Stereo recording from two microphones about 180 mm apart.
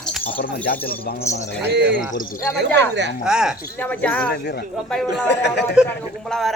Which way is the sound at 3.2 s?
5° right (ahead or behind).